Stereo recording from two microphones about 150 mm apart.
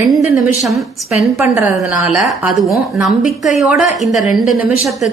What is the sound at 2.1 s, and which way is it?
Speech, centre (ahead or behind).